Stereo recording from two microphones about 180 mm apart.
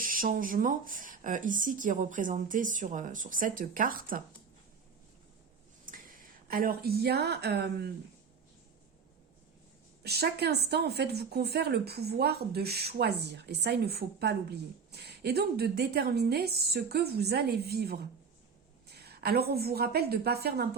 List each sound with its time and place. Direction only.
0.0 s speech: 50° right (ahead or behind)
5.8 s a woman's voice: 50° right (ahead or behind); by 7.7 s 65° right (ahead or behind)
10.0 s a woman's voice: 60° right (ahead or behind)